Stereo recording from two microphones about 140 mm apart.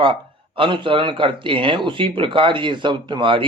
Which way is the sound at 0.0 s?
40° right (ahead or behind).